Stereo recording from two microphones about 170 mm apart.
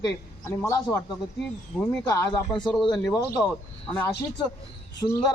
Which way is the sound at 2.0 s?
20° left (ahead or behind).